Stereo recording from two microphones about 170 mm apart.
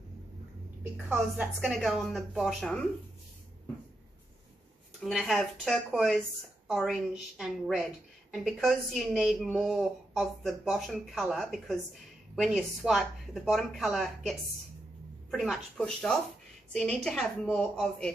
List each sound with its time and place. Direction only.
0.9 s a woman's voice: 5° right (ahead or behind)
5.0 s a woman's voice: centre (ahead or behind)
15.3 s a woman's voice: centre (ahead or behind)